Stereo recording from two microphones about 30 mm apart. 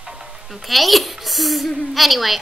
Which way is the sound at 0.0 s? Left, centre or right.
Centre.